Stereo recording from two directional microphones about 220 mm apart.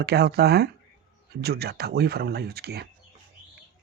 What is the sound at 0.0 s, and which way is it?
Speech, 45° right (ahead or behind).